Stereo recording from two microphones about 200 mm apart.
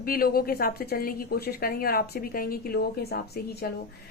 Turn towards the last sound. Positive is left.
turn(degrees=50)  # may be behind; listen again after turning